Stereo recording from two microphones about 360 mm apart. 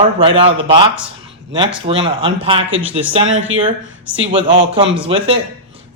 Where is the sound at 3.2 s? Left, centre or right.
Right.